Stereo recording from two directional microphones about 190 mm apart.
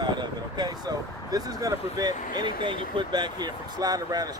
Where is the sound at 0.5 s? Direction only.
20° right (ahead or behind).